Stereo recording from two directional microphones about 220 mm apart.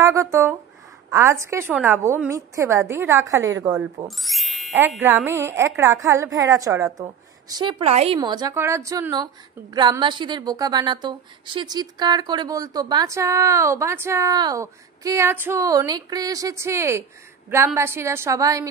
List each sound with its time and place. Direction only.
0.0 s a woman's voice: 15° right (ahead or behind)
4.2 s a woman's voice: centre (ahead or behind)